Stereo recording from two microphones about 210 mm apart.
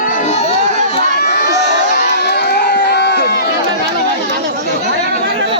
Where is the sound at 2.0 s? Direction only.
50° left (ahead or behind).